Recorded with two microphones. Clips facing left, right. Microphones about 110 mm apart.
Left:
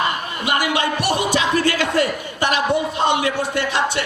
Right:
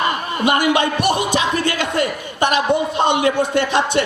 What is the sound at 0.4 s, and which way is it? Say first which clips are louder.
A man's voice: right 4 dB; 20° right (ahead or behind).